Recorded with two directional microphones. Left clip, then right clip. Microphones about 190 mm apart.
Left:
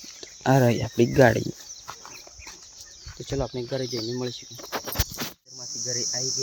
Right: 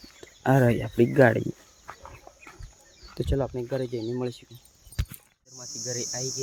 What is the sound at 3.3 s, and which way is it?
Speech, 5° right (ahead or behind).